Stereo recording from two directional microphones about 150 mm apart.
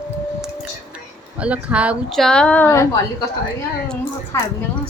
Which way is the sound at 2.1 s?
5° left (ahead or behind).